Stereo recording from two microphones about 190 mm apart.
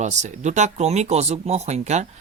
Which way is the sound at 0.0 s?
40° right (ahead or behind).